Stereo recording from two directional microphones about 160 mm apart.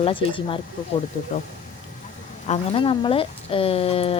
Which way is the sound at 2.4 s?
40° left (ahead or behind).